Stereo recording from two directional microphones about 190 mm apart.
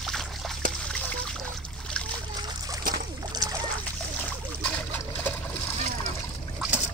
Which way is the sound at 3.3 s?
20° right (ahead or behind).